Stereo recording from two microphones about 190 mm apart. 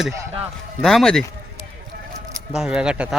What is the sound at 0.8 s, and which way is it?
Speech, centre (ahead or behind).